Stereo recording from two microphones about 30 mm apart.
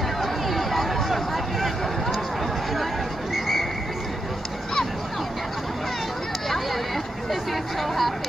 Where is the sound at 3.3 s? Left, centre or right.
Centre.